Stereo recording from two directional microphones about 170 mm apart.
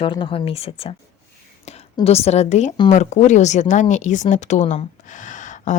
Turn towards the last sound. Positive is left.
turn(degrees=45)  # may be behind; listen again after turning